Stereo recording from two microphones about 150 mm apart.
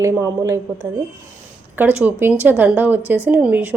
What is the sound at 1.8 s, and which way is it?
A woman's voice, 10° right (ahead or behind).